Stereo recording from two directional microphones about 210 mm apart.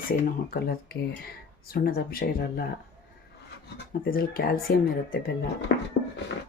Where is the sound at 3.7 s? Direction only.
45° left (ahead or behind).